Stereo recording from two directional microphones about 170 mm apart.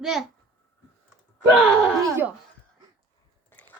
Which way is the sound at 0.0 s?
Centre (ahead or behind).